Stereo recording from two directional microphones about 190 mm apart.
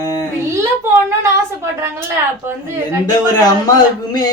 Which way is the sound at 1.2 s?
15° right (ahead or behind).